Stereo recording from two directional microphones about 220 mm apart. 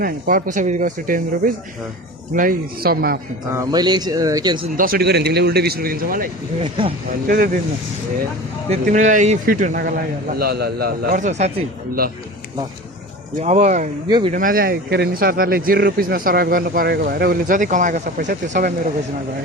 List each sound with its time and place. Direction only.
0.0 s a man's voice: 40° right (ahead or behind)
3.5 s speech: 20° right (ahead or behind)
4.8 s a man's voice: 45° right (ahead or behind)
6.6 s speech: 20° right (ahead or behind)
7.3 s speech: 40° right (ahead or behind)
8.7 s speech: 35° right (ahead or behind)
13.4 s speech: 30° right (ahead or behind)
14.1 s speech: 20° right (ahead or behind)
14.3 s speech: 40° right (ahead or behind)